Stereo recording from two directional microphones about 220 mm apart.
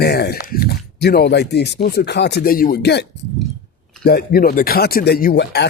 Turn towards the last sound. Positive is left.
turn(degrees=50)  # may be behind; listen again after turning